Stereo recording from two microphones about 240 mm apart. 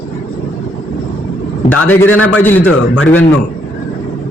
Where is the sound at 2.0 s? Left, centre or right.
Left.